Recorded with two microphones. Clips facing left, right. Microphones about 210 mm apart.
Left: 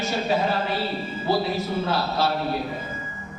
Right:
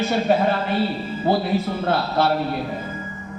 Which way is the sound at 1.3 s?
55° right (ahead or behind).